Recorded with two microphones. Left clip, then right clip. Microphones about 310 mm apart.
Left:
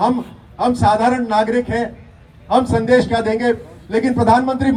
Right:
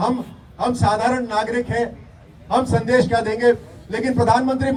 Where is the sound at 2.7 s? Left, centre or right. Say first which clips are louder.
Left 3 dB; left.